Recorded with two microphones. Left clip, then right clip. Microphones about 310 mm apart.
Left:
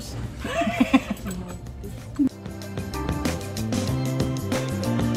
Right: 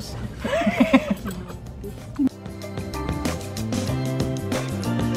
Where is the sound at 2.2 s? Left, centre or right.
Centre.